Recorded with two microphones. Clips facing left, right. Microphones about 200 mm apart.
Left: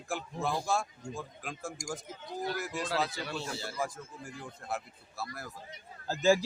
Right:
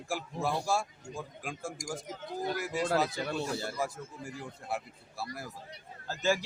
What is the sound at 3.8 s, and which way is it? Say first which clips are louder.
A man's voice: right 1 dB; 10° right (ahead or behind).